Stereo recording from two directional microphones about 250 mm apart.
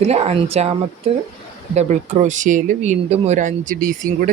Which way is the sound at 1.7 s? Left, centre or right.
Right.